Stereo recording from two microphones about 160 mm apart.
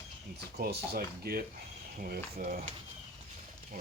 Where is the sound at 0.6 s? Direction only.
70° right (ahead or behind).